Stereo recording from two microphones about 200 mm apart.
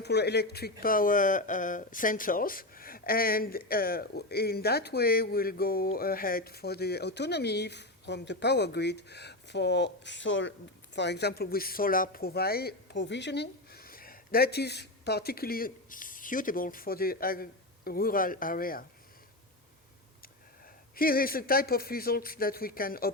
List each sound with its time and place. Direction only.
0.0 s speech: 55° left (ahead or behind)
20.9 s speech: 45° left (ahead or behind)